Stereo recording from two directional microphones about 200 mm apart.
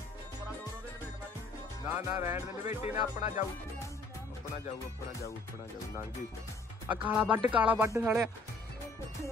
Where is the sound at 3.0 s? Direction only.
35° left (ahead or behind).